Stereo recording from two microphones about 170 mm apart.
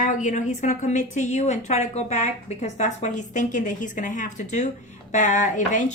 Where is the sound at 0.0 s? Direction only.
45° left (ahead or behind).